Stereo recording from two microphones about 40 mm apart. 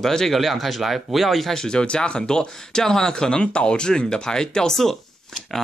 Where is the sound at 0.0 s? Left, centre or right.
Centre.